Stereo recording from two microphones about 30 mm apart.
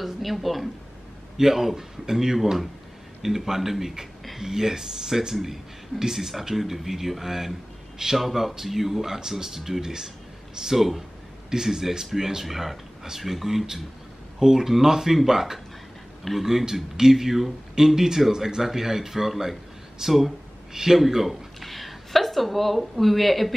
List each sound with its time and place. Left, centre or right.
0.0 s a sound: centre
1.4 s a man's voice: centre
21.0 s speech: centre